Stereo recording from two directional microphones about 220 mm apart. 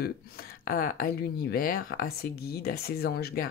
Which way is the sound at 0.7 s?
40° left (ahead or behind).